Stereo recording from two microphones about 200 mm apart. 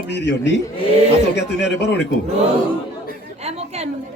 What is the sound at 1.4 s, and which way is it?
Speech, 55° left (ahead or behind).